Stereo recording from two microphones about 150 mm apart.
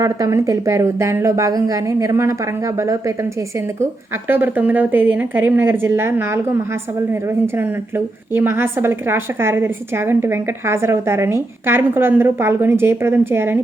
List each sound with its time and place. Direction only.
0.0 s a woman's voice: 20° right (ahead or behind)
4.3 s a woman's voice: 15° right (ahead or behind)